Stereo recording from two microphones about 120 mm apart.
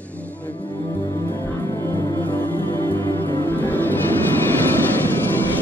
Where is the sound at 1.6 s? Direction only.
25° left (ahead or behind).